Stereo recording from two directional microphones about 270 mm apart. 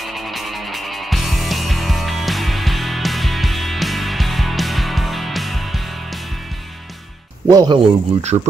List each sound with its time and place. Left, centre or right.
0.0 s music: centre
7.4 s speech: centre